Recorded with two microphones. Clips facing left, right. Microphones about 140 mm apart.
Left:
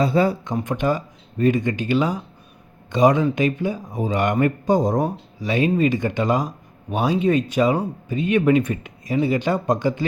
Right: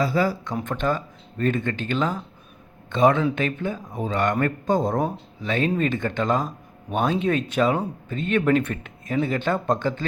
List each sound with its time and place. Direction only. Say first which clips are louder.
0.0 s speech: left 4 dB; 25° left (ahead or behind)
0.6 s speech: left 3 dB; 15° left (ahead or behind)
4.9 s speech: left 2 dB; centre (ahead or behind)